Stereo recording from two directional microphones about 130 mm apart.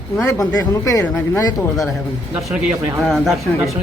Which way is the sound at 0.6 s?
25° left (ahead or behind).